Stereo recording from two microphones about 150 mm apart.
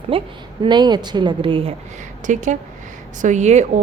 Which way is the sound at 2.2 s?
55° right (ahead or behind).